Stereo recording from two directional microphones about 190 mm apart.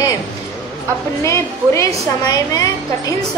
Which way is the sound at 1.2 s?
15° left (ahead or behind).